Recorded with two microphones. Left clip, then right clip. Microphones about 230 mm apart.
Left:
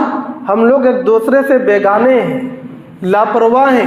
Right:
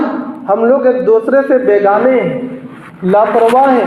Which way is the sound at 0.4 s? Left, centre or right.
Left.